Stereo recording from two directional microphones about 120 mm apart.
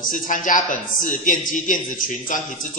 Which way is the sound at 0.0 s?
90° left.